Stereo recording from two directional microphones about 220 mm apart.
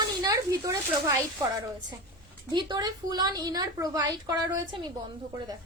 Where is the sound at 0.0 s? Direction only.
15° right (ahead or behind).